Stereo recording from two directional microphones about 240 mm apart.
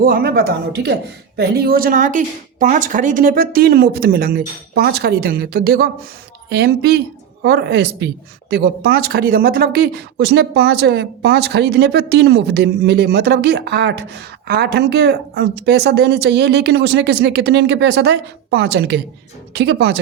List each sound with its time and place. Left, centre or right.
0.0 s a woman's voice: right